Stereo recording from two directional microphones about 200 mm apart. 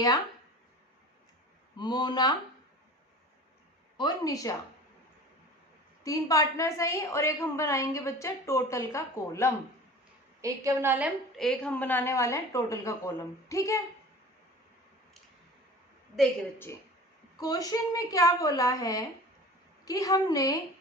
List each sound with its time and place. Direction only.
1.7 s a woman's voice: 20° left (ahead or behind)
3.9 s a woman's voice: 20° left (ahead or behind)
6.0 s a woman's voice: 15° left (ahead or behind)
10.4 s a woman's voice: 15° right (ahead or behind)
11.3 s a woman's voice: 5° left (ahead or behind)
17.3 s a woman's voice: 20° left (ahead or behind)